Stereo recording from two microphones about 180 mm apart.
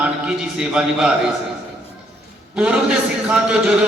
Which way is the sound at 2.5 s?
5° right (ahead or behind).